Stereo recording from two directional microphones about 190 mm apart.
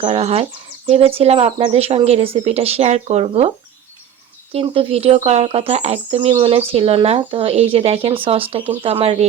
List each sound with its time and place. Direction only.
0.0 s speech: 30° right (ahead or behind)
4.5 s speech: 30° right (ahead or behind)